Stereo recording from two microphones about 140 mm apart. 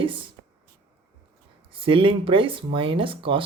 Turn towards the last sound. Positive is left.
turn(degrees=-40)  # may be behind; listen again after turning